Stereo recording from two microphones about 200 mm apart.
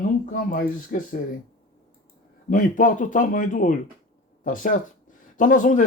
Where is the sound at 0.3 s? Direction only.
40° left (ahead or behind).